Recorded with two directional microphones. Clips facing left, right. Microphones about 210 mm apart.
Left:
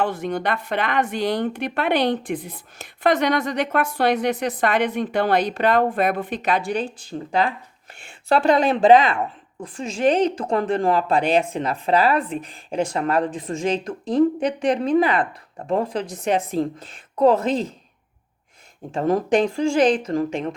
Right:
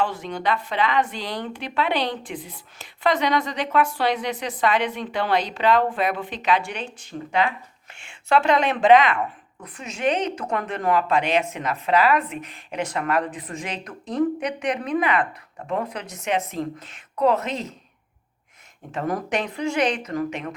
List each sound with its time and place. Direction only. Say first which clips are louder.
0.0 s speech: left 2 dB; 50° left (ahead or behind); by 17.7 s 30° left (ahead or behind)
18.9 s speech: left 7 dB; 25° left (ahead or behind)